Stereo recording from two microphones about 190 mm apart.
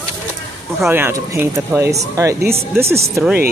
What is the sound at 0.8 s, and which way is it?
Speech, 15° right (ahead or behind).